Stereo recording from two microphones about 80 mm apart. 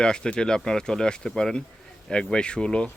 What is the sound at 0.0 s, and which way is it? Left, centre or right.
Speech, centre.